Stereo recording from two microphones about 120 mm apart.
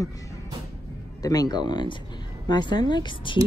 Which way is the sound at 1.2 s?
35° left (ahead or behind).